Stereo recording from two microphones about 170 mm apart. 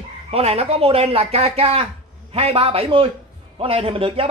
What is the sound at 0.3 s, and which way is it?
Speech, 35° right (ahead or behind).